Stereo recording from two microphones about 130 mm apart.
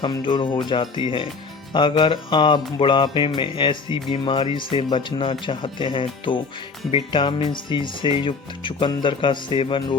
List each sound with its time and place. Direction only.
0.0 s speech: 35° left (ahead or behind)